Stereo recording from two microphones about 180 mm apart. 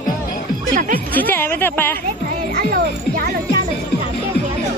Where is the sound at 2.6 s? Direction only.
55° right (ahead or behind).